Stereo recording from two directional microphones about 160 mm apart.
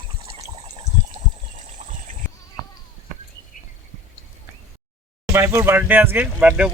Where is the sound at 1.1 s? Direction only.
55° right (ahead or behind).